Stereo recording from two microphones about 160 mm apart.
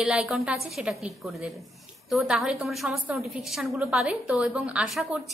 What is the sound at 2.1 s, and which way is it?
A woman's voice, centre (ahead or behind).